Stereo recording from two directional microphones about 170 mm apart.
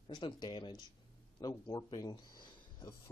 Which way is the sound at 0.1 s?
25° left (ahead or behind).